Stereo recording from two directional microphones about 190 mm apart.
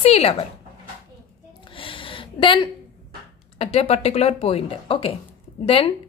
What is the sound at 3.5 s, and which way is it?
A woman's voice, 30° left (ahead or behind).